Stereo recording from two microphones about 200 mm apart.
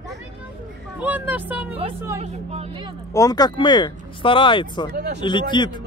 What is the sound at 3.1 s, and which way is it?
Speech, 20° left (ahead or behind).